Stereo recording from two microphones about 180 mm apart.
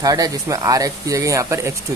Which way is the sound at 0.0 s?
20° right (ahead or behind).